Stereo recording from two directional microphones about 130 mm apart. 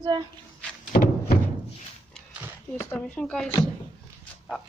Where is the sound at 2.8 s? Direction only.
15° left (ahead or behind).